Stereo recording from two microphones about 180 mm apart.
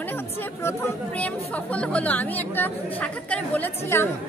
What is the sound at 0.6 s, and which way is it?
Speech, 10° left (ahead or behind).